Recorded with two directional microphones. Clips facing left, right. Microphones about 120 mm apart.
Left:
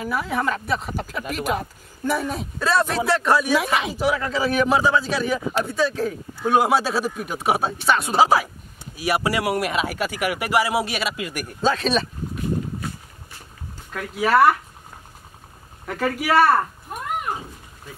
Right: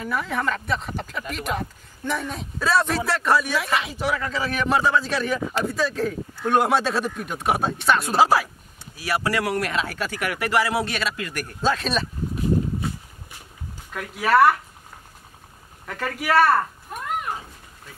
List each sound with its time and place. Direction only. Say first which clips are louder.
0.0 s speech: left 2 dB; 5° left (ahead or behind)
3.5 s speech: left 3 dB; 15° left (ahead or behind)
3.9 s speech: left 3 dB; 5° left (ahead or behind)
8.9 s speech: left 2 dB; 15° left (ahead or behind)
11.6 s speech: left 2 dB; centre (ahead or behind)
13.9 s speech: even; centre (ahead or behind)
15.9 s speech: left 2 dB; 5° left (ahead or behind)